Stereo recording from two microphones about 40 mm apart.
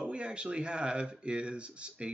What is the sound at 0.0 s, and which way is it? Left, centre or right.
Speech, right.